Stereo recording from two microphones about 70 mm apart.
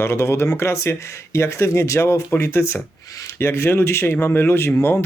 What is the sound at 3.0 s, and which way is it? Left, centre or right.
Speech, left.